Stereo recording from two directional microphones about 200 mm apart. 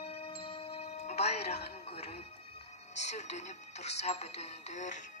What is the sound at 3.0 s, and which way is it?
Speech, 35° left (ahead or behind).